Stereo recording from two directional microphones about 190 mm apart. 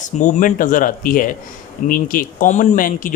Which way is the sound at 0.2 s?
40° left (ahead or behind).